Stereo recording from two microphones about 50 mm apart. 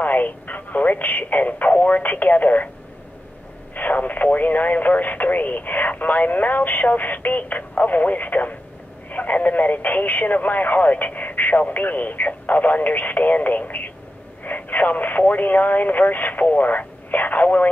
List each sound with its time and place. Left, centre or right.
0.0 s speech: left
3.7 s speech: left